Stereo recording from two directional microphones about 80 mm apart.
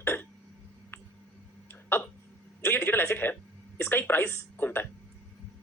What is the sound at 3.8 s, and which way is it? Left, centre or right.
Speech, left.